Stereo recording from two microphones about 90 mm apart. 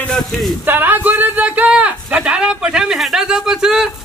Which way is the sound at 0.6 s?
20° right (ahead or behind).